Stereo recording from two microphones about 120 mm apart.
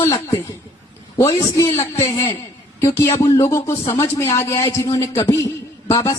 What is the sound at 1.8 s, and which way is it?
Speech, 35° left (ahead or behind).